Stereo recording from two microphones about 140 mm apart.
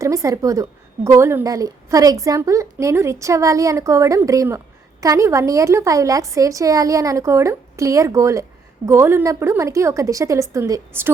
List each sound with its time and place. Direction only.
0.0 s a woman's voice: 20° right (ahead or behind)